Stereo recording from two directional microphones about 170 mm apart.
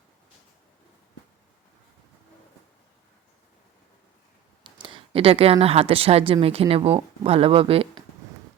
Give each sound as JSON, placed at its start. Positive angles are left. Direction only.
{"t": 4.6, "sound": "speech", "side_deg": -30}